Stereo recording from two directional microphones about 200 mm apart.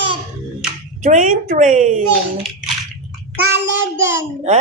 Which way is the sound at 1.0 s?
40° right (ahead or behind).